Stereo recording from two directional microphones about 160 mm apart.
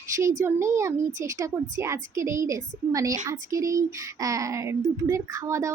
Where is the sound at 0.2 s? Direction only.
20° right (ahead or behind).